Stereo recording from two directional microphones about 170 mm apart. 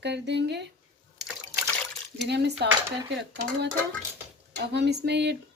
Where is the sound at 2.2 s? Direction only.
80° right.